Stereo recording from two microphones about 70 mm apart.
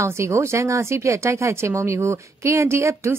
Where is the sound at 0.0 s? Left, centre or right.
Right.